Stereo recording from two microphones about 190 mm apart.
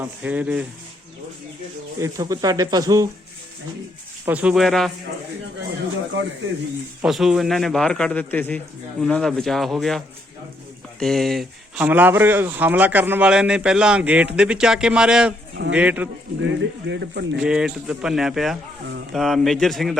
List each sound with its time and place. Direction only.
0.0 s speech: 5° right (ahead or behind)
2.0 s speech: 20° right (ahead or behind)
4.3 s speech: 5° right (ahead or behind)
7.0 s speech: centre (ahead or behind)
11.0 s speech: centre (ahead or behind)
16.4 s speech: 70° right (ahead or behind)
17.4 s speech: 5° right (ahead or behind)